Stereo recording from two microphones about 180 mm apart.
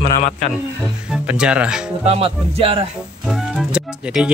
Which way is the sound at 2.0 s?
35° right (ahead or behind).